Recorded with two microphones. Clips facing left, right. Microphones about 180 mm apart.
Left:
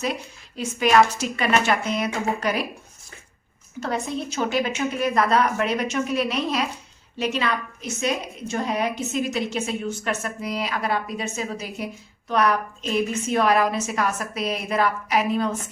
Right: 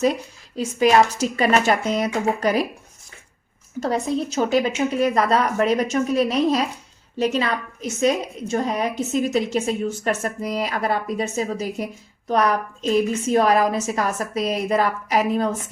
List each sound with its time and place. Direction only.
0.5 s a woman's voice: 30° right (ahead or behind)
3.8 s a woman's voice: 40° right (ahead or behind)